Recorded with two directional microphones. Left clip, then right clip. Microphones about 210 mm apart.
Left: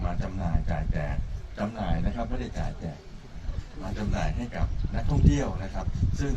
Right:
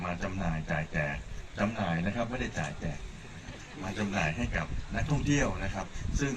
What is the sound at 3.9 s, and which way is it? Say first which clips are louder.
A man's voice: right 2 dB; 65° left (ahead or behind).